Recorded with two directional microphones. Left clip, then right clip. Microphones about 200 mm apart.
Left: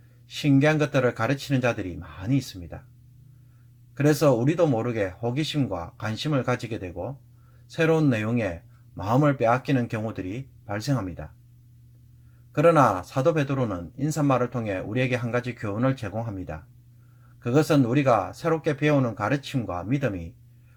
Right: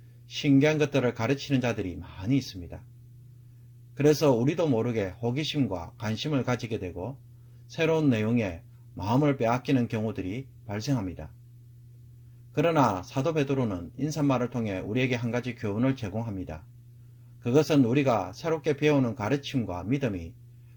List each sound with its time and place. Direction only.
0.3 s speech: 25° right (ahead or behind)
3.9 s speech: 25° right (ahead or behind)
12.5 s speech: 25° right (ahead or behind)